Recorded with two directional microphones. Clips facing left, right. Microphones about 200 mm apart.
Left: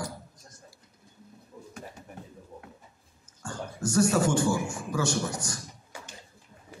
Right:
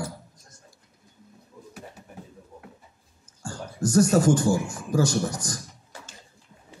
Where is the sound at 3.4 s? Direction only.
40° right (ahead or behind).